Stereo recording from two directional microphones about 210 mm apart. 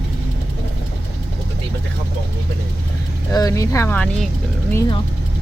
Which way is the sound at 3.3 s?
15° left (ahead or behind).